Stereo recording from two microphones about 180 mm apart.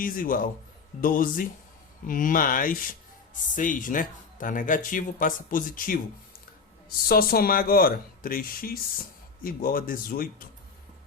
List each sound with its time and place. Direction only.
0.0 s speech: 50° left (ahead or behind)
7.1 s speech: 55° left (ahead or behind)